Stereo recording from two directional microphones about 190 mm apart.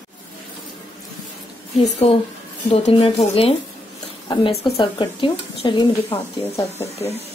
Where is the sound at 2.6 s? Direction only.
30° left (ahead or behind).